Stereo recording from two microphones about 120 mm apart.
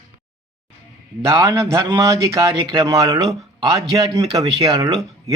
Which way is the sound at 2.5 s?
40° right (ahead or behind).